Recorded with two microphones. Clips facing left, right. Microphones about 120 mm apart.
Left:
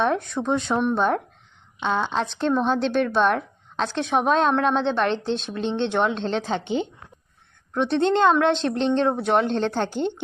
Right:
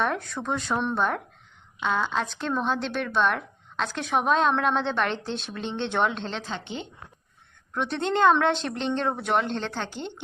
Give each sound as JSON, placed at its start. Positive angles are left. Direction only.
{"t": 0.0, "sound": "a woman's voice", "side_deg": 20}
{"t": 4.3, "sound": "a woman's voice", "side_deg": 35}
{"t": 4.7, "sound": "a woman's voice", "side_deg": 20}
{"t": 7.7, "sound": "a woman's voice", "side_deg": 25}